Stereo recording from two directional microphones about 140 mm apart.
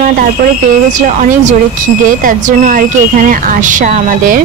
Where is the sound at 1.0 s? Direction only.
65° right (ahead or behind).